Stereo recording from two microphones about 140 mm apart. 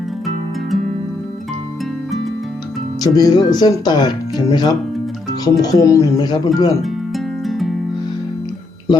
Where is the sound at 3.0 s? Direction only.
30° left (ahead or behind).